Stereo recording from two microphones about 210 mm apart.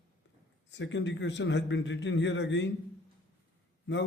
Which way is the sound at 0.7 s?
60° left (ahead or behind).